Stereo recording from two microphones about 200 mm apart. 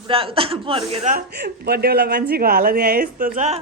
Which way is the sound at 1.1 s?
50° right (ahead or behind).